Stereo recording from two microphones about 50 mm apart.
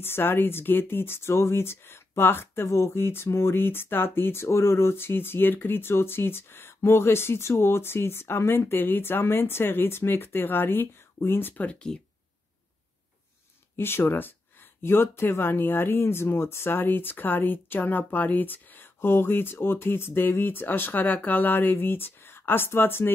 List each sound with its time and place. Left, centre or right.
0.0 s speech: left
11.5 s speech: left
13.7 s speech: left
18.9 s speech: left